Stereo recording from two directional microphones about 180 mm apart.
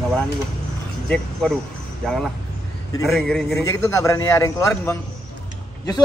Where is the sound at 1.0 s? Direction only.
5° left (ahead or behind).